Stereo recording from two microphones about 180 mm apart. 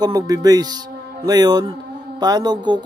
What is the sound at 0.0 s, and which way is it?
Speech, 20° right (ahead or behind).